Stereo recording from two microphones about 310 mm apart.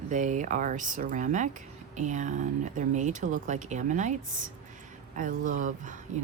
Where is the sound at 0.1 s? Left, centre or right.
Right.